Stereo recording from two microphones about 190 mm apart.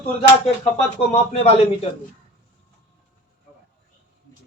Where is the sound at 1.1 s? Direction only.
35° left (ahead or behind).